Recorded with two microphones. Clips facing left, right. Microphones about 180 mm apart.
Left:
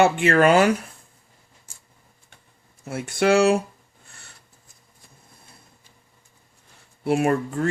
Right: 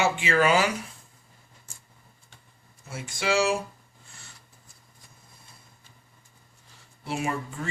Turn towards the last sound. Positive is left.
turn(degrees=60)  # may be behind; listen again after turning